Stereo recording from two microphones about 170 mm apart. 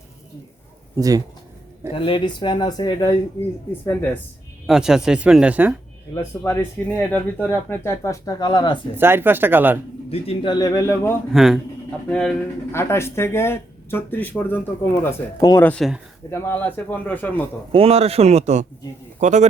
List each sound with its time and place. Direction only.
0.9 s speech: 20° right (ahead or behind)
1.9 s speech: 30° left (ahead or behind)
4.6 s speech: 5° right (ahead or behind)
6.4 s speech: 15° left (ahead or behind)
9.0 s speech: 10° right (ahead or behind)
10.1 s speech: 30° left (ahead or behind)
11.3 s speech: centre (ahead or behind)
17.7 s a man's voice: 35° right (ahead or behind)